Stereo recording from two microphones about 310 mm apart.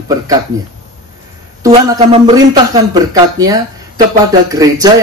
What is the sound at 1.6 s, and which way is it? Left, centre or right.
A man's voice, centre.